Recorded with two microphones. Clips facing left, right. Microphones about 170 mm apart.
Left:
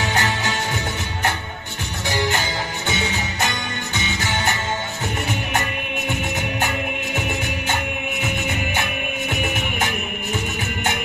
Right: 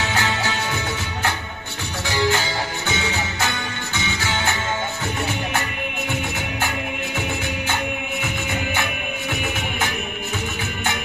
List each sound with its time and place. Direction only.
0.0 s music: 20° left (ahead or behind)
2.0 s music: 20° left (ahead or behind)
3.9 s music: 20° left (ahead or behind)